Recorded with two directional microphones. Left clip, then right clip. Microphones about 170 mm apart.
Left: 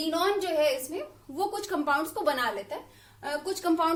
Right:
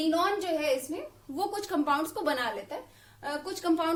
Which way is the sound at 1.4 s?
25° right (ahead or behind).